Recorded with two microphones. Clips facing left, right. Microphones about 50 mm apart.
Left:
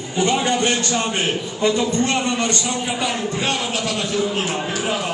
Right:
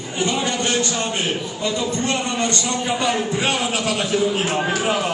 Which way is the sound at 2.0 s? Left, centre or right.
Left.